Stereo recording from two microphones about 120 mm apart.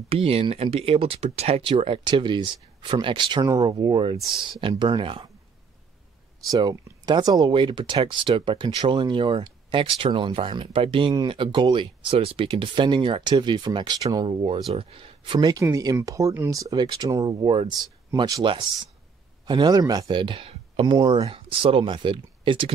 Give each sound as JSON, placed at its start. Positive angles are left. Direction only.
{"t": 0.1, "sound": "speech", "side_deg": -55}
{"t": 6.5, "sound": "speech", "side_deg": -35}
{"t": 15.3, "sound": "speech", "side_deg": -35}